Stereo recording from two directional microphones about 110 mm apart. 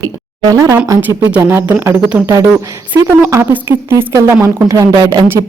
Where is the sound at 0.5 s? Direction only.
30° right (ahead or behind).